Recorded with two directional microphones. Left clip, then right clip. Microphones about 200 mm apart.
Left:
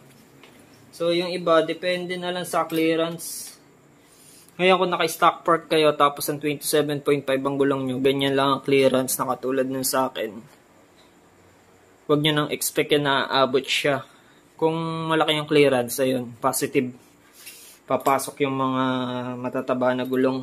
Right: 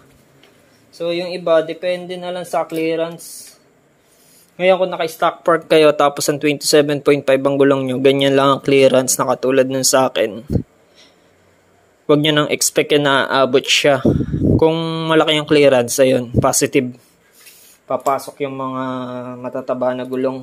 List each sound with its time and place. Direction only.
0.9 s speech: 20° right (ahead or behind)
4.6 s speech: 15° right (ahead or behind)
5.4 s speech: 40° right (ahead or behind)
12.1 s speech: 40° right (ahead or behind)
17.8 s speech: 10° right (ahead or behind)